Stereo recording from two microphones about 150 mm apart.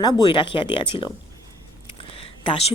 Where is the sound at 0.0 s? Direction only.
25° left (ahead or behind).